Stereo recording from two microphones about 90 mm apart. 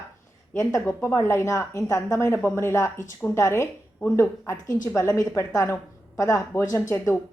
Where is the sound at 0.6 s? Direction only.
35° left (ahead or behind).